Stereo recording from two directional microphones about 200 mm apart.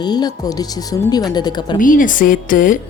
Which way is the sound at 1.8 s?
45° left (ahead or behind).